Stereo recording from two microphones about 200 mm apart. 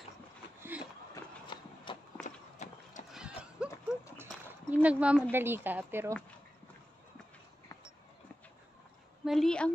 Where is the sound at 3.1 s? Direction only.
5° right (ahead or behind).